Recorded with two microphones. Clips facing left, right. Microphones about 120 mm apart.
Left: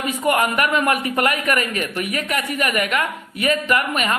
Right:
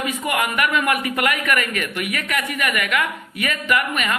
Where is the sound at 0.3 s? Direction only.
40° left (ahead or behind).